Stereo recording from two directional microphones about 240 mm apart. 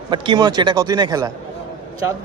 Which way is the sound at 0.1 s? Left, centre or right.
Centre.